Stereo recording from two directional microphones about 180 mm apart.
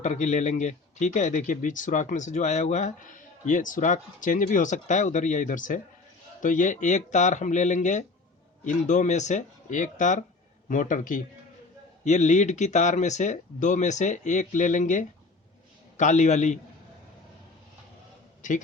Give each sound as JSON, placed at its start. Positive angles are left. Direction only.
{"t": 0.0, "sound": "speech", "side_deg": 40}